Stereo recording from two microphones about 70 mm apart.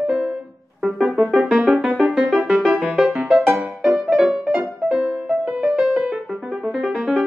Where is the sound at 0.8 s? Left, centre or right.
Centre.